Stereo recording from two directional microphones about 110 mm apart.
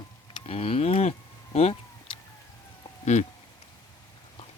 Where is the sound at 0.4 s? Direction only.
60° left (ahead or behind).